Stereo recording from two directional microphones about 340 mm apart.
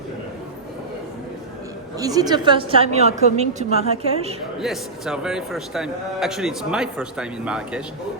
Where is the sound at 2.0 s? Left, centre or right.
Centre.